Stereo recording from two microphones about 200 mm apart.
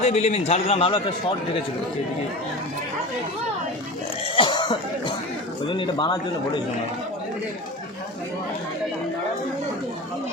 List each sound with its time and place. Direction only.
0.0 s a man's voice: 35° left (ahead or behind)
4.4 s cough: 25° left (ahead or behind)
5.6 s speech: 25° left (ahead or behind)